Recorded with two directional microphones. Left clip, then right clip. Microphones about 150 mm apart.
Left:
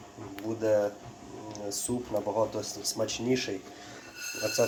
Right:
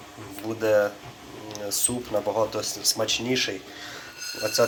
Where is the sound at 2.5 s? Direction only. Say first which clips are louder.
Right 7 dB; 15° left (ahead or behind).